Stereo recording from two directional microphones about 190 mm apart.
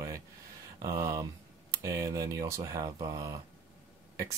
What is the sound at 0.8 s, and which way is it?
Speech, 15° right (ahead or behind).